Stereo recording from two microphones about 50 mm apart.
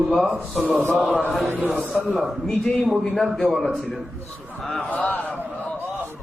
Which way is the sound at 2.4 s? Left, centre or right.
Centre.